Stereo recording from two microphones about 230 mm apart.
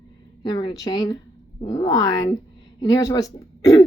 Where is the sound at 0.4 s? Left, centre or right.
Centre.